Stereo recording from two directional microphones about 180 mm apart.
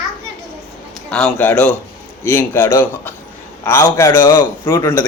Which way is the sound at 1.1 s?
10° left (ahead or behind).